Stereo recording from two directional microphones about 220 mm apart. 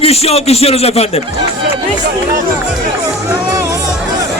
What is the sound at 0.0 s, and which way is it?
Speech, 30° left (ahead or behind).